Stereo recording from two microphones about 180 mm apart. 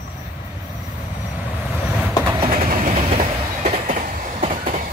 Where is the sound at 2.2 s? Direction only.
25° right (ahead or behind).